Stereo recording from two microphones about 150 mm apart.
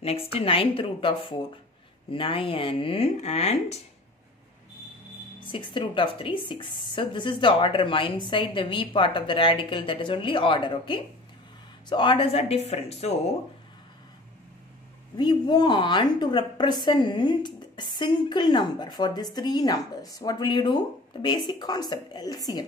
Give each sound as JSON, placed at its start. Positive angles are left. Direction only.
{"t": 0.0, "sound": "a woman's voice", "side_deg": 40}
{"t": 5.5, "sound": "a woman's voice", "side_deg": 35}
{"t": 15.1, "sound": "a woman's voice", "side_deg": 30}